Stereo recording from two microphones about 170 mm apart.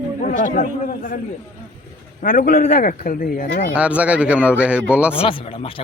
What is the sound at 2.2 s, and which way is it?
Speech, 50° left (ahead or behind).